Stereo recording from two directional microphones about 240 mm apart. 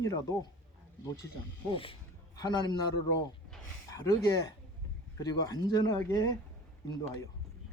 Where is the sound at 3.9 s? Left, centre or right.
Centre.